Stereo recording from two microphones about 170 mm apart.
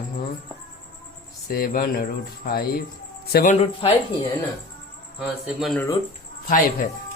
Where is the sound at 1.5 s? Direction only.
60° left (ahead or behind).